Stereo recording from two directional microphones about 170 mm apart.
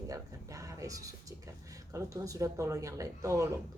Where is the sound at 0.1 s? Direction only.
20° right (ahead or behind).